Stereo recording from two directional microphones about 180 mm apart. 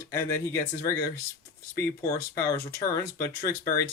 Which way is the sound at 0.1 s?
15° left (ahead or behind).